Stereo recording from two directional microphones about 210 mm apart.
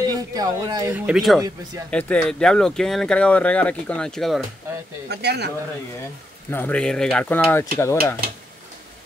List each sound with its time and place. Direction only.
0.0 s speech: 20° right (ahead or behind); by 4.5 s centre (ahead or behind)
5.0 s speech: 50° right (ahead or behind)
6.5 s speech: 5° left (ahead or behind)